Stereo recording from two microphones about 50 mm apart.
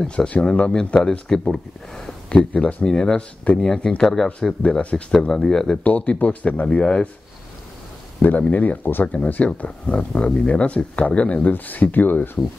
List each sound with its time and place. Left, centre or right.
0.0 s speech: centre
1.5 s speech: centre
2.2 s speech: left
4.6 s speech: left
5.3 s speech: centre
5.9 s speech: left
8.2 s speech: left
9.0 s speech: left
11.4 s speech: left